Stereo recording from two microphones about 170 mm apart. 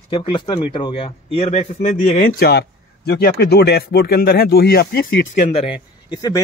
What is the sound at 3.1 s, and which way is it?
Speech, 65° left (ahead or behind).